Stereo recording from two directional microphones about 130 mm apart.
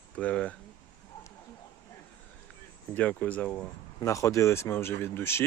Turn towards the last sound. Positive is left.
turn(degrees=20)  # may be behind; listen again after turning